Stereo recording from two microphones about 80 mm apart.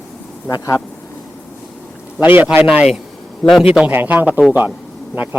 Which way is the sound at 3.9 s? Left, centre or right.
Right.